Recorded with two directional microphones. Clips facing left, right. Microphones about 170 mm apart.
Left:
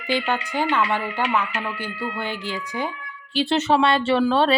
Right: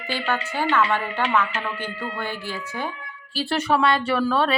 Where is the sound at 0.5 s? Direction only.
15° left (ahead or behind).